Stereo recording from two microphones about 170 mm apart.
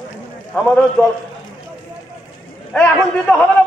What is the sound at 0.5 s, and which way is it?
Speech, 5° left (ahead or behind).